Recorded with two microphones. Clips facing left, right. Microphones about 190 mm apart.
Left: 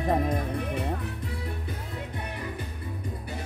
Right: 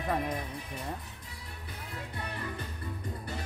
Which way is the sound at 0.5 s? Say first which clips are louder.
Left 11 dB; 65° left (ahead or behind).